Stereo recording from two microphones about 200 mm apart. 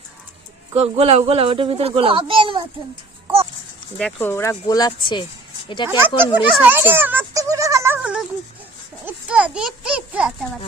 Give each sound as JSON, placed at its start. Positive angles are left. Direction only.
{"t": 0.7, "sound": "speech", "side_deg": -30}
{"t": 3.9, "sound": "speech", "side_deg": 10}
{"t": 6.3, "sound": "a sound", "side_deg": -10}
{"t": 9.0, "sound": "a child's voice", "side_deg": -5}